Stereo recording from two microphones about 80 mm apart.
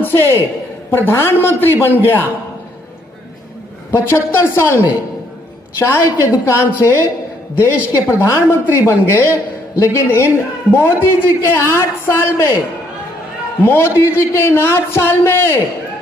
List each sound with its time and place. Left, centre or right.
0.0 s a man's voice: left
4.1 s a man's voice: left
8.1 s a man's voice: left
13.7 s a man's voice: left